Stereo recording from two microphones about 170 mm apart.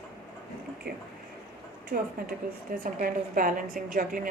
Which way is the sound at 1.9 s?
60° right (ahead or behind).